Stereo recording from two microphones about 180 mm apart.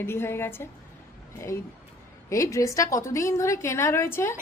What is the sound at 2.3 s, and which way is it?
A woman's voice, 15° left (ahead or behind).